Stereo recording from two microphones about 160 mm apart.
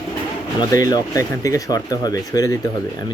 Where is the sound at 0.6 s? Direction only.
25° left (ahead or behind).